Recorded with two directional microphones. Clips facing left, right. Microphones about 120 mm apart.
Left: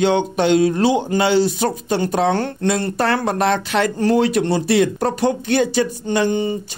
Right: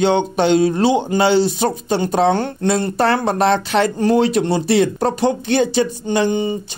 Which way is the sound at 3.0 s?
25° right (ahead or behind).